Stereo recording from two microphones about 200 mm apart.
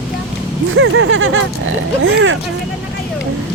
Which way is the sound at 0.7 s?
85° right.